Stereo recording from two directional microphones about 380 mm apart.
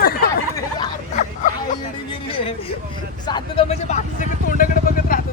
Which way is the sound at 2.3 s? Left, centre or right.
Centre.